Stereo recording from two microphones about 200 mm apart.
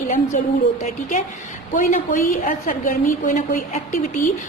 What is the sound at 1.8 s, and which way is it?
A woman's voice, 40° left (ahead or behind).